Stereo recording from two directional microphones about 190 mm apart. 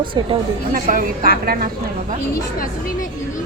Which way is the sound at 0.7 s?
45° right (ahead or behind).